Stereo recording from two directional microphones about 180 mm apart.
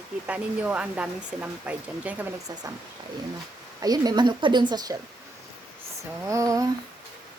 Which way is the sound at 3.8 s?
20° right (ahead or behind).